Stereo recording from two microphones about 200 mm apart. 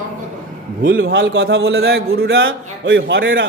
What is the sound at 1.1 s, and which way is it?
Speech, 65° right (ahead or behind).